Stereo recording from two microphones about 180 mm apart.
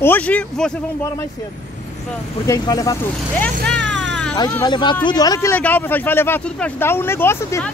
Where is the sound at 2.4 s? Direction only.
20° left (ahead or behind).